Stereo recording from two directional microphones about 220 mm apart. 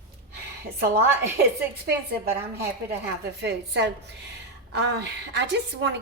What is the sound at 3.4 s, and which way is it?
A woman's voice, 50° right (ahead or behind).